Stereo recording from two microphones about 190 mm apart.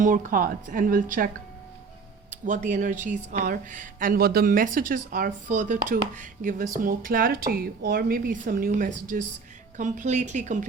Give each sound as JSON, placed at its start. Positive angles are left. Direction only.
{"t": 0.0, "sound": "speech", "side_deg": -45}
{"t": 2.3, "sound": "speech", "side_deg": -40}